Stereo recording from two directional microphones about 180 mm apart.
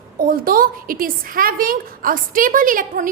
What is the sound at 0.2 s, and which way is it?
A woman's voice, 50° right (ahead or behind).